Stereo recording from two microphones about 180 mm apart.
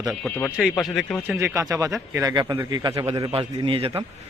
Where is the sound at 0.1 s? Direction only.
5° left (ahead or behind).